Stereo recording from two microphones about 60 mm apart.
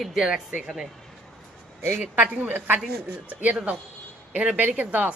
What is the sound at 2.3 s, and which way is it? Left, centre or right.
A woman's voice, right.